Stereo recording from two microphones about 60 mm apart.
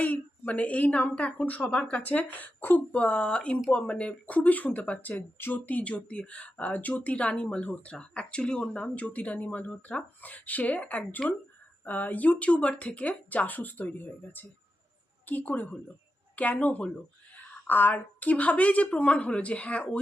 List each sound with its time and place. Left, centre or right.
0.0 s speech: left
3.0 s a woman's voice: centre